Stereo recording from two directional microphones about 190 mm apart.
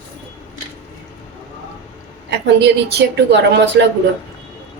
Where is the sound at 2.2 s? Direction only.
65° right (ahead or behind).